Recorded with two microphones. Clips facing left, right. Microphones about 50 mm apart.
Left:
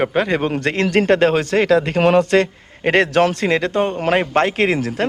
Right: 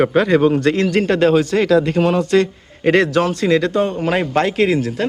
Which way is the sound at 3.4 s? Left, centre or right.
Left.